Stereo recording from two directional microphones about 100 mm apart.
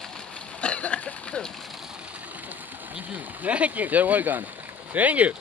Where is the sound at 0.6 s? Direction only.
10° left (ahead or behind).